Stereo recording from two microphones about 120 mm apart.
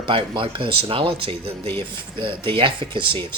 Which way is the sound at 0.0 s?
45° right (ahead or behind).